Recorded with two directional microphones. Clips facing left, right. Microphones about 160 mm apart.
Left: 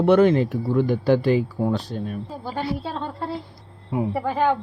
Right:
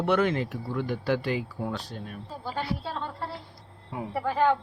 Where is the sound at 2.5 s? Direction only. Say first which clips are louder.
Left 5 dB; 20° left (ahead or behind).